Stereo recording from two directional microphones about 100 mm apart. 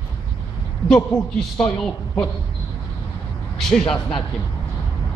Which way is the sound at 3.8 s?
55° left (ahead or behind).